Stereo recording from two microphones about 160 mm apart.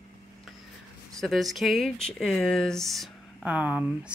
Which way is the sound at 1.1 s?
Centre (ahead or behind).